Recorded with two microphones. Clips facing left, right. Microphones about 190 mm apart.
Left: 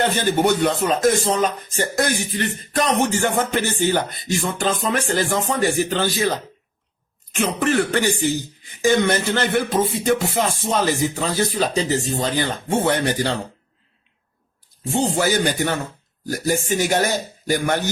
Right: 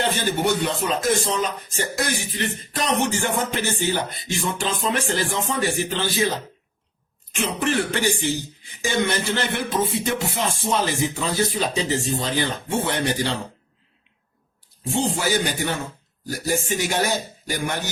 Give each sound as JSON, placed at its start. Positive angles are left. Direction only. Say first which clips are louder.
{"t": 0.0, "sound": "music", "louder": "left 4 dB", "side_deg": 50}
{"t": 7.3, "sound": "music", "louder": "left 4 dB", "side_deg": 45}
{"t": 14.8, "sound": "music", "louder": "left 3 dB", "side_deg": 45}